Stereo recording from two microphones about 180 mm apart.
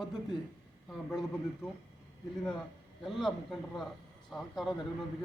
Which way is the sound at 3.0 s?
Centre (ahead or behind).